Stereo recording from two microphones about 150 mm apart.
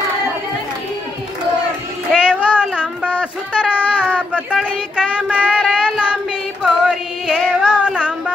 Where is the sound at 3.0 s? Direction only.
10° left (ahead or behind).